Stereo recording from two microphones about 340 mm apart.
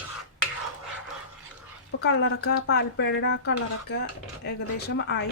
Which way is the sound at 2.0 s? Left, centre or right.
Left.